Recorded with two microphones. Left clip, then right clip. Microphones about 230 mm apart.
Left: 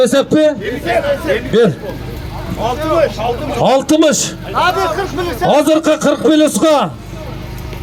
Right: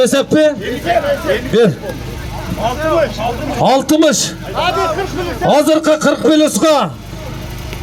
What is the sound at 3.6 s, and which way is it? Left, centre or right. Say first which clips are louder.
Speech: even; centre.